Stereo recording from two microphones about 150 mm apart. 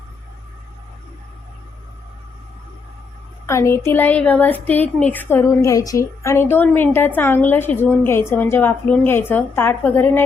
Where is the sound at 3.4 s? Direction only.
20° left (ahead or behind).